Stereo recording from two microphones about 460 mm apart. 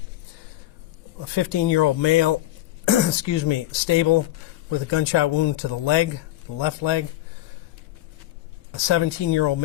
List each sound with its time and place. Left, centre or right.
1.2 s speech: left
8.7 s speech: left